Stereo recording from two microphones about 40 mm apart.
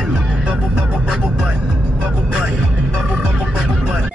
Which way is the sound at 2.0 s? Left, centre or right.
Right.